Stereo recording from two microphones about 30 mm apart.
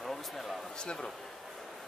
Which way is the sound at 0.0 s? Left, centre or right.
Centre.